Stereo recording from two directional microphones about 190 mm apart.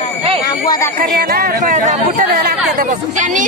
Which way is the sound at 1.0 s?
50° right (ahead or behind).